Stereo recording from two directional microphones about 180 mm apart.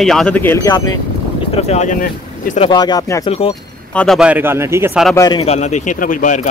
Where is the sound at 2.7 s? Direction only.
25° left (ahead or behind).